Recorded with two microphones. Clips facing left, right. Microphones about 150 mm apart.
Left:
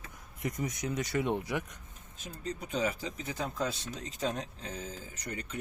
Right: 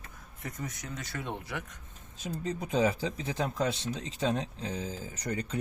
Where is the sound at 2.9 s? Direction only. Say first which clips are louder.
Right 5 dB; 30° right (ahead or behind).